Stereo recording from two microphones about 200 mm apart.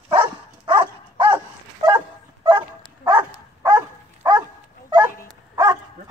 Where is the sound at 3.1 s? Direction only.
15° right (ahead or behind).